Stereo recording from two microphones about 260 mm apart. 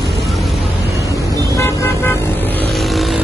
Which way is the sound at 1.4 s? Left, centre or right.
Centre.